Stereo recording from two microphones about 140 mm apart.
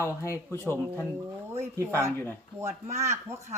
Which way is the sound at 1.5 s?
15° right (ahead or behind).